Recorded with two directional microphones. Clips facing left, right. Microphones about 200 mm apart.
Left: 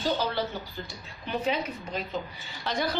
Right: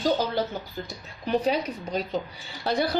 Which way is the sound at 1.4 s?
35° right (ahead or behind).